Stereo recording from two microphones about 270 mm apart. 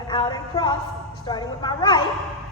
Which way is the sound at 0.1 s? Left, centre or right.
Centre.